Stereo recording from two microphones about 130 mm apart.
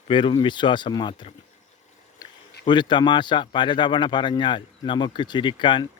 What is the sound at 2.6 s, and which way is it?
Speech, 35° left (ahead or behind).